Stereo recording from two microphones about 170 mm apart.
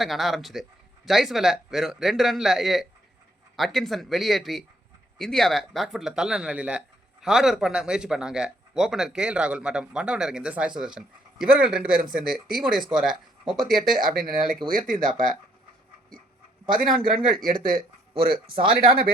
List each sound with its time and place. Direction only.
0.0 s a man's voice: centre (ahead or behind)
14.7 s speech: 55° right (ahead or behind)
16.7 s speech: 55° right (ahead or behind)
18.4 s speech: 30° right (ahead or behind)
18.9 s speech: 60° right (ahead or behind)